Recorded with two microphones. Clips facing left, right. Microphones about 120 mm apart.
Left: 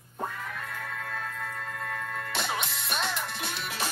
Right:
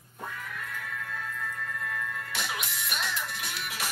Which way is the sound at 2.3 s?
25° left (ahead or behind).